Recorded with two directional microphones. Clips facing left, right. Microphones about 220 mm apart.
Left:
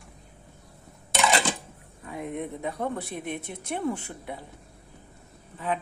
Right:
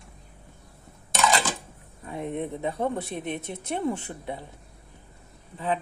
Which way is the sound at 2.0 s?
30° right (ahead or behind).